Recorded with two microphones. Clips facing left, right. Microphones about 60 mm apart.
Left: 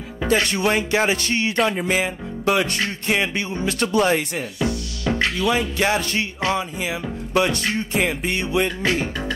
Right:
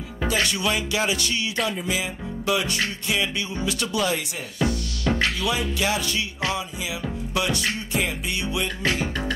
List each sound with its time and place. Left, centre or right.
0.3 s speech: left
1.6 s speech: left
4.6 s music: left
5.5 s speech: left